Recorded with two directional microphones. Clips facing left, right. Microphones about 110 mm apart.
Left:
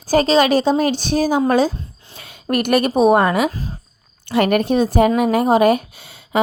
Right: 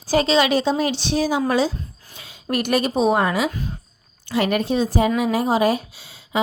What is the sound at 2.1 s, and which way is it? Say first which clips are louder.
Speech: left 4 dB; 55° left (ahead or behind).